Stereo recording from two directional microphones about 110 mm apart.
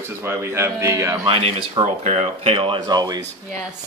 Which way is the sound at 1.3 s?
60° right (ahead or behind).